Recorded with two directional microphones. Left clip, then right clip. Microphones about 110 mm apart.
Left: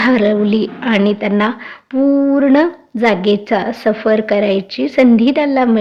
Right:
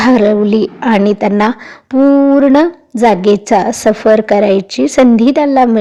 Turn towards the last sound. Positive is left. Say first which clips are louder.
# right 4 dB
turn(degrees=-40)  # may be behind; listen again after turning